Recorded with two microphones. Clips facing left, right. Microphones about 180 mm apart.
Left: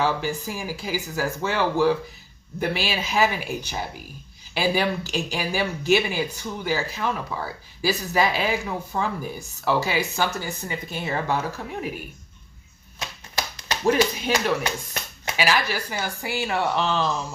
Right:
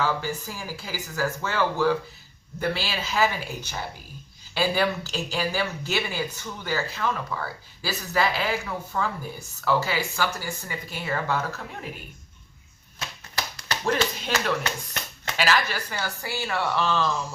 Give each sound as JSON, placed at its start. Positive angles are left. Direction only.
{"t": 0.0, "sound": "speech", "side_deg": 15}
{"t": 13.3, "sound": "speech", "side_deg": 15}